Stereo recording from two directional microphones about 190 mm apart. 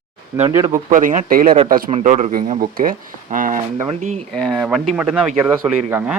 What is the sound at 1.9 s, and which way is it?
Speech, 35° right (ahead or behind).